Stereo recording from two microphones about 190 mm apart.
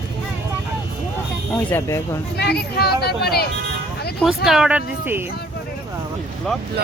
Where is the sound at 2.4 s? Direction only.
55° left (ahead or behind).